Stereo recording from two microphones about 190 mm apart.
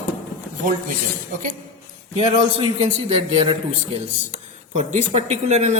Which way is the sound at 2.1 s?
30° right (ahead or behind).